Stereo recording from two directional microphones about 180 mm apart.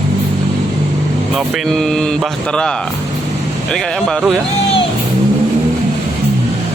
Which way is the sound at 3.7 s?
Centre (ahead or behind).